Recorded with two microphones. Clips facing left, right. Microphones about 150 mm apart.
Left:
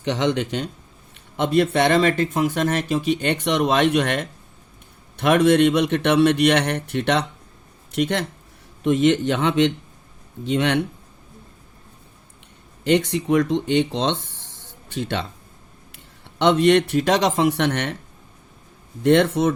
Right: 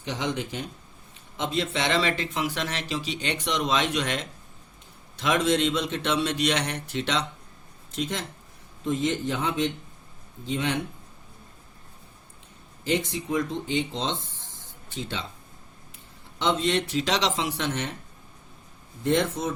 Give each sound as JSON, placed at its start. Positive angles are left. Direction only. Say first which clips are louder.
{"t": 0.0, "sound": "speech", "louder": "left 8 dB", "side_deg": 70}
{"t": 12.8, "sound": "speech", "louder": "left 8 dB", "side_deg": 70}
{"t": 16.4, "sound": "speech", "louder": "left 9 dB", "side_deg": 65}
{"t": 19.0, "sound": "speech", "louder": "left 8 dB", "side_deg": 75}